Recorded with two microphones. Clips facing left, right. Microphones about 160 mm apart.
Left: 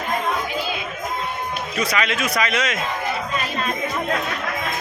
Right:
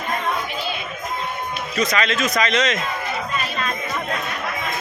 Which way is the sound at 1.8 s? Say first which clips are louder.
Right 2 dB; 10° left (ahead or behind).